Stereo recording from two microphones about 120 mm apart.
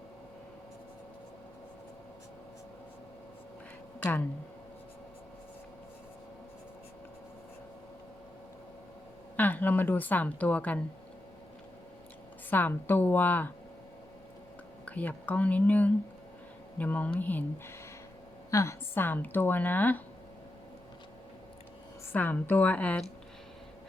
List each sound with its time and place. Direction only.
4.0 s a woman's voice: 15° left (ahead or behind)
9.3 s a woman's voice: 15° left (ahead or behind)
12.5 s a woman's voice: 15° left (ahead or behind)
14.8 s a woman's voice: 10° left (ahead or behind)
18.5 s a woman's voice: 25° left (ahead or behind)
22.1 s a woman's voice: 15° left (ahead or behind)